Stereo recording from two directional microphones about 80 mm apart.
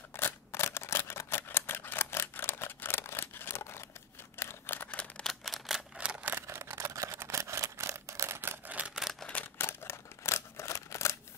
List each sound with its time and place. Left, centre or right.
0.1 s camera: left
5.2 s camera: centre
5.9 s a sound: centre
6.4 s camera: right
8.6 s camera: centre
9.2 s camera: centre
9.6 s scissors: left